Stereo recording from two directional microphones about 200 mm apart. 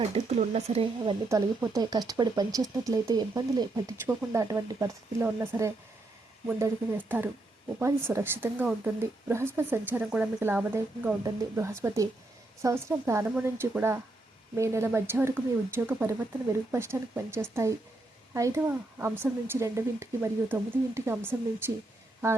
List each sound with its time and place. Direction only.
0.1 s speech: 35° right (ahead or behind)
1.3 s speech: 15° right (ahead or behind)